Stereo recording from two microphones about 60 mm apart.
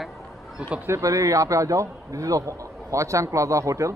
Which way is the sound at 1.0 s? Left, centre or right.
Right.